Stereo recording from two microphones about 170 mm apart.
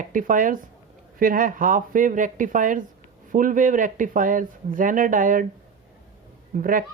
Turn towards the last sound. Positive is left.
turn(degrees=-55)  # may be behind; listen again after turning